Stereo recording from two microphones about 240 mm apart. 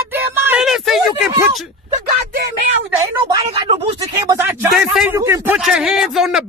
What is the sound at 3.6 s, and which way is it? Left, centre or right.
Speech, right.